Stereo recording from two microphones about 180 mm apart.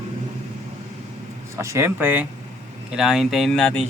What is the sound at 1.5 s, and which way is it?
Speech, 15° right (ahead or behind).